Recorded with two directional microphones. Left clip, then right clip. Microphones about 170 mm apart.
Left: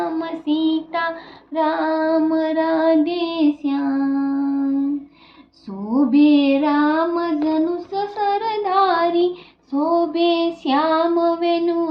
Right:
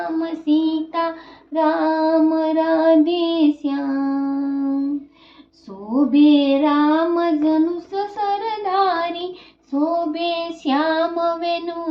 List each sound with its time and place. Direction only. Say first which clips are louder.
0.0 s child singing: even; 15° left (ahead or behind)
5.9 s child singing: even; 15° left (ahead or behind)